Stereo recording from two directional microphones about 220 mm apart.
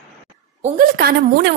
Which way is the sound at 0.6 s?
40° right (ahead or behind).